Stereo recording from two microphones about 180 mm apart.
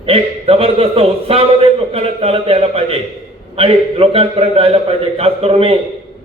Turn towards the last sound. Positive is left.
turn(degrees=-35)  # may be behind; listen again after turning